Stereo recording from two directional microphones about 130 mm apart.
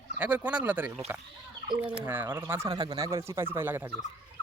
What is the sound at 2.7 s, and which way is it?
Speech, 30° right (ahead or behind).